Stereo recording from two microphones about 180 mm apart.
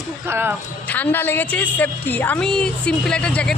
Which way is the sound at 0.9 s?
10° left (ahead or behind).